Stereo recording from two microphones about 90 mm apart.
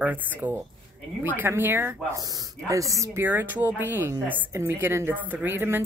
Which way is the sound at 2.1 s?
45° right (ahead or behind).